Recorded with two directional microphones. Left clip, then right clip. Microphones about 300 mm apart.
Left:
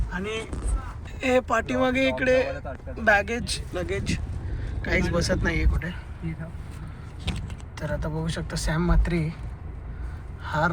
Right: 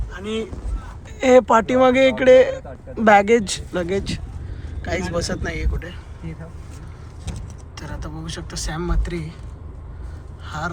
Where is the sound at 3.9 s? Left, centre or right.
Centre.